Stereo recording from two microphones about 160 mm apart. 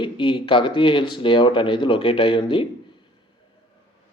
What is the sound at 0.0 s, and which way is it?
Speech, 30° left (ahead or behind).